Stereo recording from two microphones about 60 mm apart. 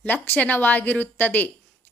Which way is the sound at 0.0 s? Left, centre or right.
Left.